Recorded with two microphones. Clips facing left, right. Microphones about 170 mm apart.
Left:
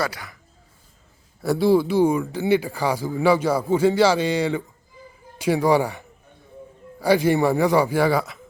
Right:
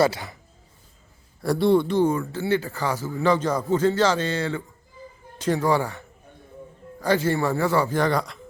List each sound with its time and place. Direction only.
0.0 s speech: 25° right (ahead or behind)
1.4 s speech: centre (ahead or behind)